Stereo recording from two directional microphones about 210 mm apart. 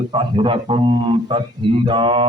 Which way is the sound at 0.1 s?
25° right (ahead or behind).